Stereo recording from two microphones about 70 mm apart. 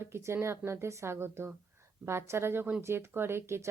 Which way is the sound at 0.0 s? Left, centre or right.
Right.